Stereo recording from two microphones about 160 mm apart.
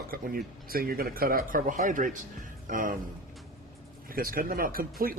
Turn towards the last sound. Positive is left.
turn(degrees=-65)  # may be behind; listen again after turning